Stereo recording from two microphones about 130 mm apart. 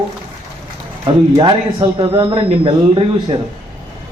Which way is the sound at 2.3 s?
45° right (ahead or behind).